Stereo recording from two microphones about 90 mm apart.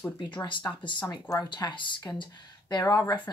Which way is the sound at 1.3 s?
50° left (ahead or behind).